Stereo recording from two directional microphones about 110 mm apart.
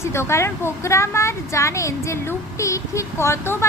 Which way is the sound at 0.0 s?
25° left (ahead or behind).